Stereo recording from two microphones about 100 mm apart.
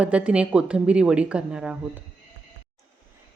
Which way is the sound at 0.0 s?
10° right (ahead or behind).